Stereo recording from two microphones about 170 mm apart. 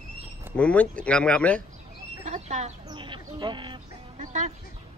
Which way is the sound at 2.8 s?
30° right (ahead or behind).